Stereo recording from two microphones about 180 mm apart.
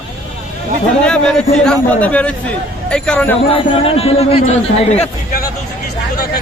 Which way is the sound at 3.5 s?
30° left (ahead or behind).